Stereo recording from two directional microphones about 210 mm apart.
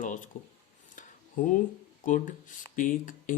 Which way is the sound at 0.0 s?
40° left (ahead or behind).